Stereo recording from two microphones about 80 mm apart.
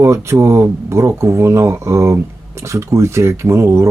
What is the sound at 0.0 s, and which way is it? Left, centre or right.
Speech, right.